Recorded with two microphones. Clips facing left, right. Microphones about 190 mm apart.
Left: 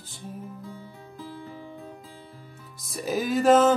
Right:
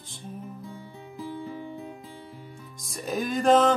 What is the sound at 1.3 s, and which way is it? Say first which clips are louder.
Music: right 6 dB; 20° right (ahead or behind).